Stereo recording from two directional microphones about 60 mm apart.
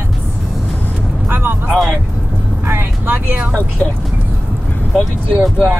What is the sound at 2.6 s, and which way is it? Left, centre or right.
Speech, right.